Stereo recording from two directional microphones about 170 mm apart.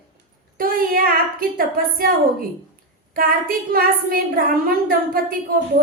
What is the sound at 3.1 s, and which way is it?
A woman's voice, 55° right (ahead or behind).